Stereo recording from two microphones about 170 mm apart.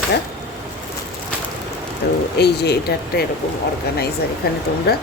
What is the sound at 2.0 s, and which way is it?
Speech, 70° left (ahead or behind).